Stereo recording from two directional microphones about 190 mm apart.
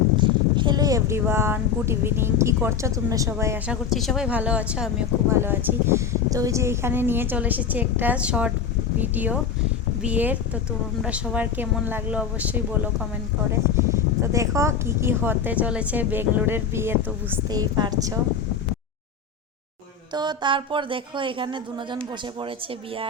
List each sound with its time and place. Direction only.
0.2 s speech: 25° right (ahead or behind)
3.8 s speech: centre (ahead or behind); by 18.2 s 20° right (ahead or behind)
20.1 s speech: 25° right (ahead or behind)